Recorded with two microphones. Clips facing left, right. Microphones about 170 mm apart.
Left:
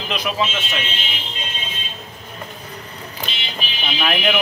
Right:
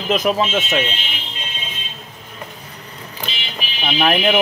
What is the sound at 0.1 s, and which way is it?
Speech, 45° right (ahead or behind).